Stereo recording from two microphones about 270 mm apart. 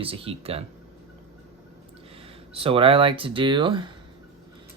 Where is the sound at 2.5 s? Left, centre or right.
Centre.